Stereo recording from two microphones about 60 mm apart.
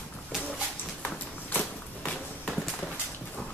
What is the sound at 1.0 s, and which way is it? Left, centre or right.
Walk, left.